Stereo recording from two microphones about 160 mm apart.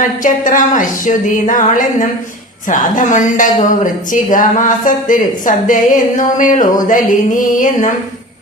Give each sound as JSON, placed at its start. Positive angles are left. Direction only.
{"t": 0.0, "sound": "a woman's voice", "side_deg": 55}